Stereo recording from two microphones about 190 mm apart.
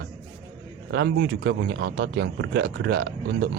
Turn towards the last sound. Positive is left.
turn(degrees=-60)  # may be behind; listen again after turning